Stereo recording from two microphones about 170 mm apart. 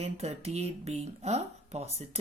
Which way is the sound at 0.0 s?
40° right (ahead or behind).